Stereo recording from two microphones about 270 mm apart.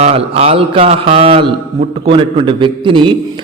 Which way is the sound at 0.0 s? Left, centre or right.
Right.